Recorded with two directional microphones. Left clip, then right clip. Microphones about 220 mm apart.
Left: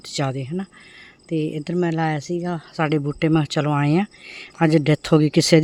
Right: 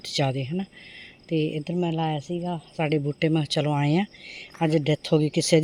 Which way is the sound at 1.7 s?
25° left (ahead or behind).